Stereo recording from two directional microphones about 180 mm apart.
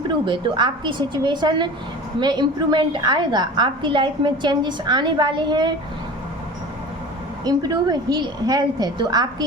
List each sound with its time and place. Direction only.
0.3 s a woman's voice: 25° right (ahead or behind)
7.4 s a woman's voice: 20° right (ahead or behind)